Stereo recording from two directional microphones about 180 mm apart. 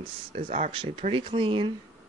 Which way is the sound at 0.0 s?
30° right (ahead or behind).